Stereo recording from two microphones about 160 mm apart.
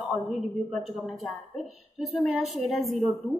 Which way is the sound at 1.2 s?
Centre (ahead or behind).